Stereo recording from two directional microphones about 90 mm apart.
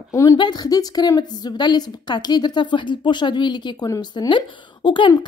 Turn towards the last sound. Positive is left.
turn(degrees=65)  # may be behind; listen again after turning